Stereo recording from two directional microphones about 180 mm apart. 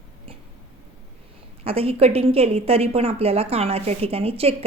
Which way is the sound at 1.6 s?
35° right (ahead or behind).